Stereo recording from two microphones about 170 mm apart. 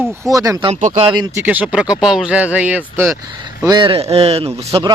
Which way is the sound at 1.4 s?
10° right (ahead or behind).